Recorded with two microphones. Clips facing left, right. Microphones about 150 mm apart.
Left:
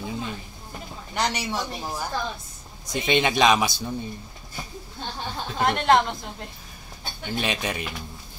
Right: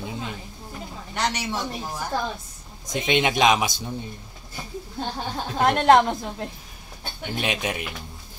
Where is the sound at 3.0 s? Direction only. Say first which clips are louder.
Even; 15° right (ahead or behind).